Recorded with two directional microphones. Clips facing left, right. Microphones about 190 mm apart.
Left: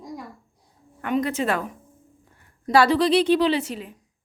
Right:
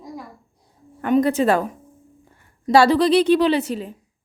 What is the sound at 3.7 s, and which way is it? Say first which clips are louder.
Speech: right 6 dB; 35° right (ahead or behind).